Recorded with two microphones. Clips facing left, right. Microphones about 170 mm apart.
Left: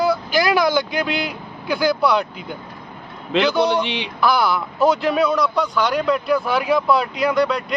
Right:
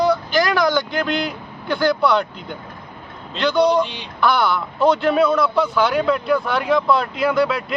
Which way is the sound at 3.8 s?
80° left.